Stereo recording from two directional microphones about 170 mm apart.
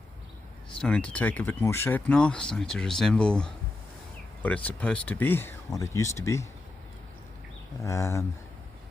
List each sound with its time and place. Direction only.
0.8 s speech: 5° left (ahead or behind)
7.9 s speech: 15° left (ahead or behind)